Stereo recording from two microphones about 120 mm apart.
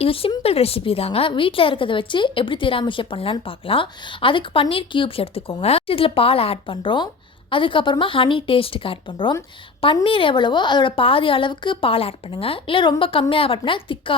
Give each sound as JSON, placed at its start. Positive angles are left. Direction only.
{"t": 0.0, "sound": "a woman's voice", "side_deg": 50}